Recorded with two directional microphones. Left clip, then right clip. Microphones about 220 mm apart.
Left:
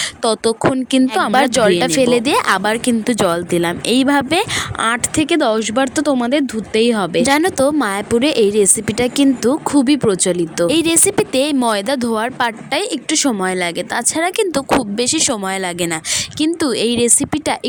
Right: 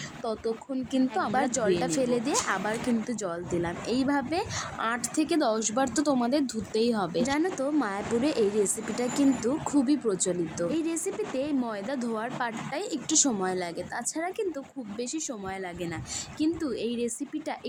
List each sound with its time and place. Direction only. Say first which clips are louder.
0.0 s a woman's voice: left 16 dB; 45° left (ahead or behind)